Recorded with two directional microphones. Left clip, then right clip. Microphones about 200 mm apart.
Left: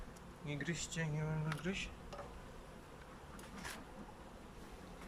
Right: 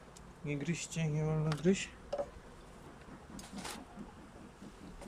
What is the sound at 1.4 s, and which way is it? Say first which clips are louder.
Speech: right 11 dB; 30° right (ahead or behind).